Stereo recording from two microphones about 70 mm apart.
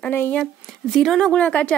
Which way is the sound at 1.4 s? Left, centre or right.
Left.